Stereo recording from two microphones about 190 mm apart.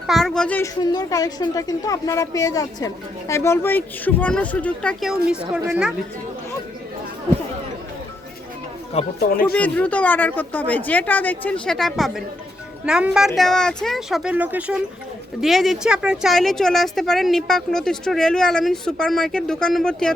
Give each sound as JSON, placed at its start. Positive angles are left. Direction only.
{"t": 0.1, "sound": "a woman's voice", "side_deg": 0}
{"t": 0.8, "sound": "a woman's voice", "side_deg": 20}
{"t": 5.6, "sound": "speech", "side_deg": -10}
{"t": 9.1, "sound": "speech", "side_deg": 50}
{"t": 9.6, "sound": "a woman's voice", "side_deg": 10}